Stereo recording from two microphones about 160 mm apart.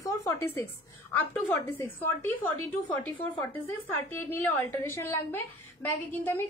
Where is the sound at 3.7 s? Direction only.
10° left (ahead or behind).